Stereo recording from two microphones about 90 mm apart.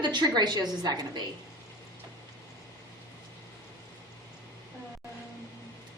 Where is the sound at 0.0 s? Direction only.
55° right (ahead or behind).